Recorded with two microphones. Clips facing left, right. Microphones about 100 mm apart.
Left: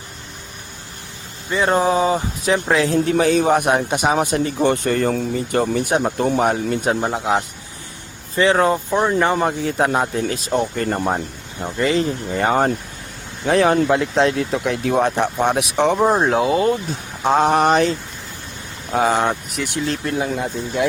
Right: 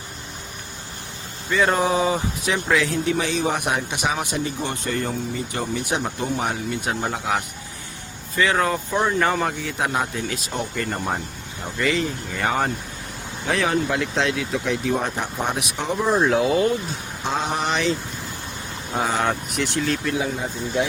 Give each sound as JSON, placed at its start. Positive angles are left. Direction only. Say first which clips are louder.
{"t": 1.5, "sound": "speech", "louder": "left 3 dB", "side_deg": 25}
{"t": 4.4, "sound": "speech", "louder": "left 8 dB", "side_deg": 55}
{"t": 7.0, "sound": "speech", "louder": "left 5 dB", "side_deg": 25}
{"t": 8.9, "sound": "speech", "louder": "left 3 dB", "side_deg": 15}
{"t": 9.6, "sound": "speech", "louder": "left 6 dB", "side_deg": 35}
{"t": 14.7, "sound": "speech", "louder": "left 5 dB", "side_deg": 65}
{"t": 16.0, "sound": "speech", "louder": "left 2 dB", "side_deg": 40}
{"t": 17.2, "sound": "speech", "louder": "left 9 dB", "side_deg": 60}
{"t": 19.6, "sound": "speech", "louder": "even", "side_deg": 0}
{"t": 20.1, "sound": "speech", "louder": "left 3 dB", "side_deg": 65}